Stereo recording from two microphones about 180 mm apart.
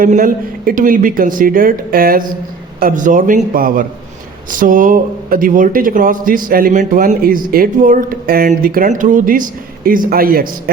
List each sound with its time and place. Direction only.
0.0 s speech: 50° right (ahead or behind)